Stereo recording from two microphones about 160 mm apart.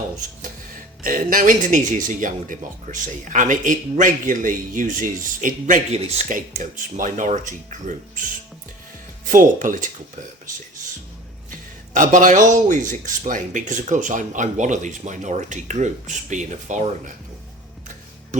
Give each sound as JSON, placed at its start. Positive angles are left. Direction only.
{"t": 1.0, "sound": "speech", "side_deg": -60}
{"t": 9.3, "sound": "speech", "side_deg": -55}
{"t": 11.9, "sound": "speech", "side_deg": -50}